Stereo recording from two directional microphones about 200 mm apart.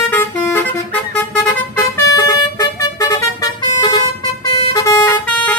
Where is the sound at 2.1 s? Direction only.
15° left (ahead or behind).